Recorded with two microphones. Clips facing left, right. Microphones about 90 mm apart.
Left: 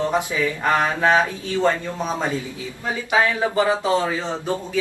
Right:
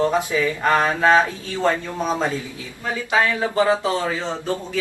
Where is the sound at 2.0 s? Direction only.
15° right (ahead or behind).